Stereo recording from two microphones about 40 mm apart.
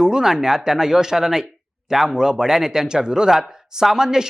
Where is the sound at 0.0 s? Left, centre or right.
Centre.